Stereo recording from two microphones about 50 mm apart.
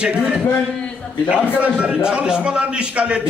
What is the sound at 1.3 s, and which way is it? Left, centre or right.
A man's voice, right.